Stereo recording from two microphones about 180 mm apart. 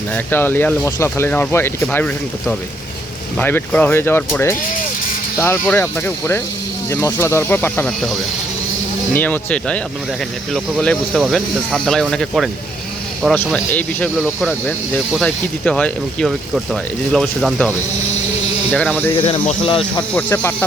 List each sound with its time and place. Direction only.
0.3 s speech: 10° left (ahead or behind)
3.3 s speech: 10° left (ahead or behind)
9.1 s speech: 10° left (ahead or behind)
19.1 s speech: 35° left (ahead or behind)
20.1 s speech: 10° left (ahead or behind)